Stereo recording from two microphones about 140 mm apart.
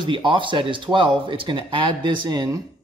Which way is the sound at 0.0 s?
35° right (ahead or behind).